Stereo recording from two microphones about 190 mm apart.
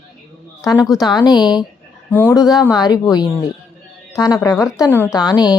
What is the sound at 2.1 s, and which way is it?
Speech, 10° left (ahead or behind).